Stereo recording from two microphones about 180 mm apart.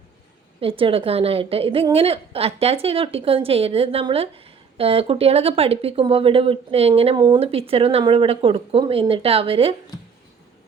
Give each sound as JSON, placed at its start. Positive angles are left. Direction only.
{"t": 0.6, "sound": "a woman's voice", "side_deg": -30}